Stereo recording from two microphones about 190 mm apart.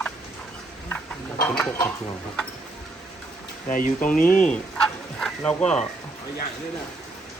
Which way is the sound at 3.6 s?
45° left (ahead or behind).